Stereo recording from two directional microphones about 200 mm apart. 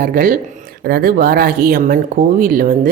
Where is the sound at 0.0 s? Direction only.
45° right (ahead or behind).